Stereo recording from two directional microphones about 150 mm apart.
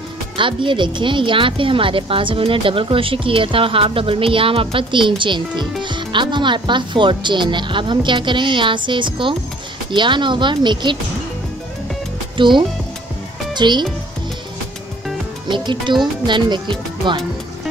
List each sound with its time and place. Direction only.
0.4 s speech: 35° right (ahead or behind)
12.4 s speech: 35° right (ahead or behind)
15.4 s speech: 30° right (ahead or behind)